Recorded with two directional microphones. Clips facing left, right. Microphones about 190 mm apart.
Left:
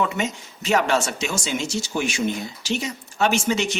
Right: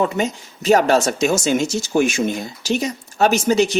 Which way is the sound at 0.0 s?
40° right (ahead or behind).